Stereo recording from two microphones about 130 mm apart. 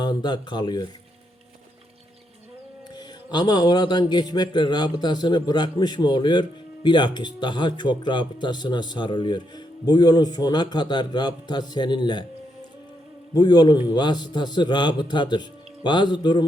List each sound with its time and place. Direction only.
0.0 s speech: 35° left (ahead or behind)
2.9 s speech: 35° left (ahead or behind)
13.3 s speech: 35° left (ahead or behind)